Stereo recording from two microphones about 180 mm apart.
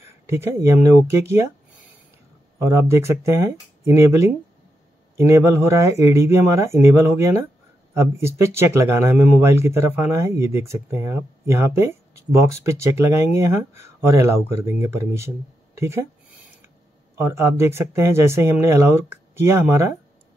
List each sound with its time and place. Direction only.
0.0 s speech: 15° right (ahead or behind)
2.6 s speech: 15° right (ahead or behind)
17.2 s speech: 15° right (ahead or behind)